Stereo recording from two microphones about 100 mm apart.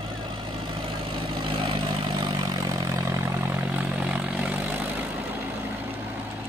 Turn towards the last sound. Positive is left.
turn(degrees=-15)  # may be behind; listen again after turning